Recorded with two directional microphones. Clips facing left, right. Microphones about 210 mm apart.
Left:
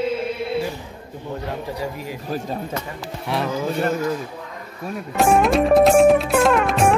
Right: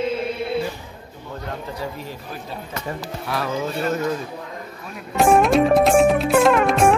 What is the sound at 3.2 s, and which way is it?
Speech, 25° left (ahead or behind).